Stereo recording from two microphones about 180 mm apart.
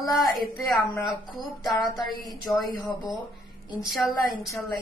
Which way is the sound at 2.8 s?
25° left (ahead or behind).